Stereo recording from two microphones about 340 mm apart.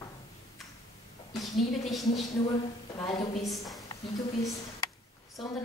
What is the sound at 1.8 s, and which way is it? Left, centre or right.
Speech, centre.